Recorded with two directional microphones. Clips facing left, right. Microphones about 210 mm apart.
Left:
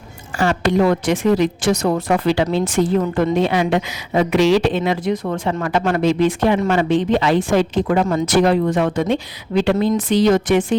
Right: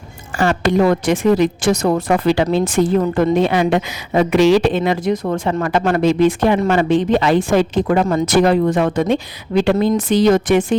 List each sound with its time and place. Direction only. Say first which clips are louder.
0.3 s speech: right 1 dB; 50° right (ahead or behind)